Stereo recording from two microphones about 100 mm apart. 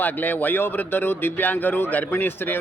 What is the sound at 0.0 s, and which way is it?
Speech, 15° left (ahead or behind).